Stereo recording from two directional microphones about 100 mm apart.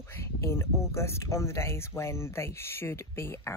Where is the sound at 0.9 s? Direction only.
25° left (ahead or behind).